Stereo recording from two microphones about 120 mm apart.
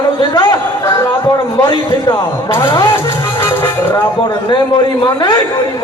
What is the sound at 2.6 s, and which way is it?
Speech, 40° left (ahead or behind).